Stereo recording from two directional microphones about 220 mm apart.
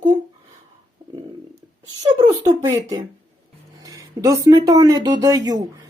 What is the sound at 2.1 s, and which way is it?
Speech, 20° right (ahead or behind).